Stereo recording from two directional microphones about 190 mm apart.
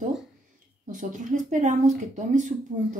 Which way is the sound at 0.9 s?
40° right (ahead or behind).